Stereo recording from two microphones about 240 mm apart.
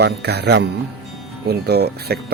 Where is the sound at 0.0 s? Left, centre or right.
Right.